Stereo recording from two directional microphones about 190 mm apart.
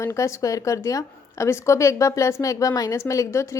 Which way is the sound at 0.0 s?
15° left (ahead or behind).